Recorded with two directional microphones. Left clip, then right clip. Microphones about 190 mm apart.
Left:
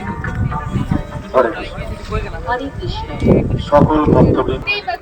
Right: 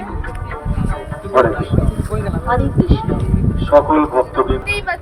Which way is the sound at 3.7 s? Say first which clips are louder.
Even; 45° left (ahead or behind).